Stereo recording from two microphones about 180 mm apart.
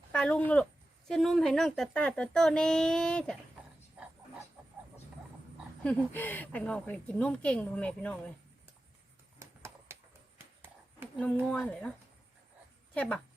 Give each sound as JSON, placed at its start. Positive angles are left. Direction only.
{"t": 0.1, "sound": "speech", "side_deg": 5}
{"t": 4.0, "sound": "a sound", "side_deg": -5}
{"t": 5.8, "sound": "a woman's voice", "side_deg": 10}
{"t": 9.4, "sound": "a sound", "side_deg": -15}
{"t": 11.4, "sound": "speech", "side_deg": 5}
{"t": 12.9, "sound": "speech", "side_deg": 5}